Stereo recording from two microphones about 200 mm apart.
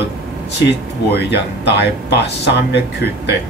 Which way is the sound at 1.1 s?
55° left (ahead or behind).